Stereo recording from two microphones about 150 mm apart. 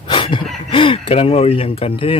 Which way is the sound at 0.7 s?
35° left (ahead or behind).